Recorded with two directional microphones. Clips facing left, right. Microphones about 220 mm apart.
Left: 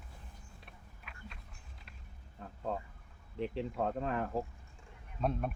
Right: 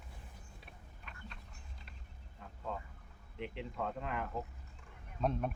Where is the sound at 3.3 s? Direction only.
35° left (ahead or behind).